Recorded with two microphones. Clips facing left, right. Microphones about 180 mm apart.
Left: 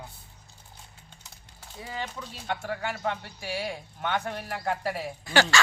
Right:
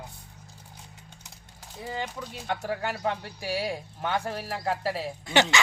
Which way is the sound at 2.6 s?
40° right (ahead or behind).